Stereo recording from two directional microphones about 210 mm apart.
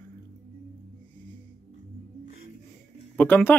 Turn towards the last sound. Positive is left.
turn(degrees=10)  # may be behind; listen again after turning